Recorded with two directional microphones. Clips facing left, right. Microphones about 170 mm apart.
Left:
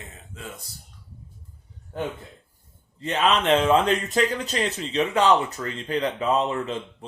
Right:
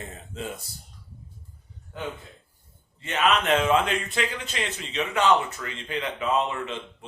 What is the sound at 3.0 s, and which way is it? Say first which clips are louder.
Speech: left 2 dB; 35° left (ahead or behind).